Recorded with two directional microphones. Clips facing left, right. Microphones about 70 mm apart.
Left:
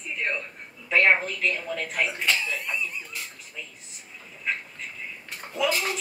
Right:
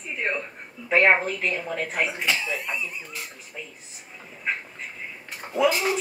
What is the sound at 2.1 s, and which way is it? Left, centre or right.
Speech, centre.